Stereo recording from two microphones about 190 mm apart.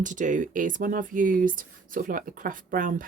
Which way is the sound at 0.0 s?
40° right (ahead or behind).